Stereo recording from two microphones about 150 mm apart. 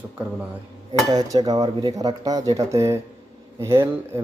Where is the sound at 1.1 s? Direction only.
25° right (ahead or behind).